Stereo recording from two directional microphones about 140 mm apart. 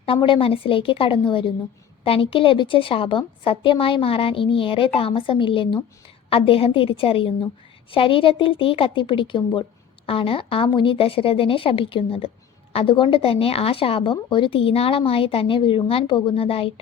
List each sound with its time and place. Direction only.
0.0 s speech: 40° left (ahead or behind)